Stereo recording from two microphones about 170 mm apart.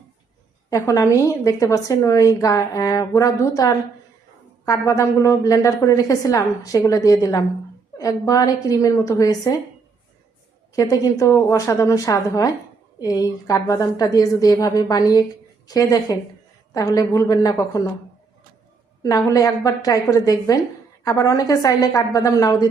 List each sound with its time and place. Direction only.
0.7 s a woman's voice: 20° left (ahead or behind)
10.8 s a woman's voice: 20° left (ahead or behind)
19.0 s a woman's voice: 20° left (ahead or behind)